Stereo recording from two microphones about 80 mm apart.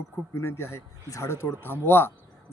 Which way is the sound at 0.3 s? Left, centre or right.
Left.